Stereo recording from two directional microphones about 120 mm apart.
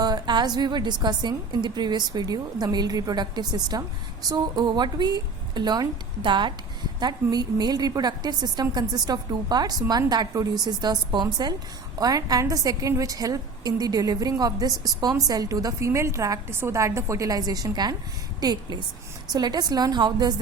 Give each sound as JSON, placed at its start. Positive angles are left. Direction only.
{"t": 0.0, "sound": "a woman's voice", "side_deg": -35}